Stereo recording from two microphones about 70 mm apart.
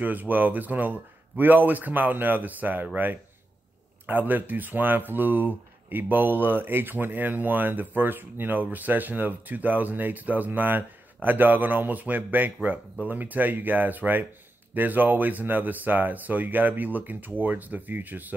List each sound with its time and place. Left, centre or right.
0.0 s speech: right